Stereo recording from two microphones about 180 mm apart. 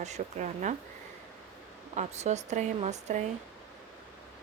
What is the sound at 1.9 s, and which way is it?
Speech, 40° right (ahead or behind).